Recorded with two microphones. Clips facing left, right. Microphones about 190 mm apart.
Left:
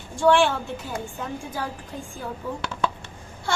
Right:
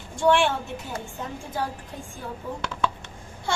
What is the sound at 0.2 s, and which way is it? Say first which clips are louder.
Speech: left 2 dB; 20° right (ahead or behind).